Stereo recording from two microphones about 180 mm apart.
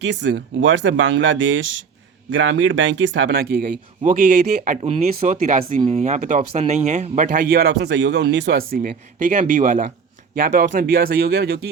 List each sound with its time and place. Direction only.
0.0 s speech: 80° right
3.4 s speech: 55° right (ahead or behind)